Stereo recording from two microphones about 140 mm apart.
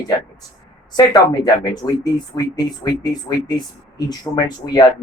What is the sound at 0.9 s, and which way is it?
Speech, 30° left (ahead or behind).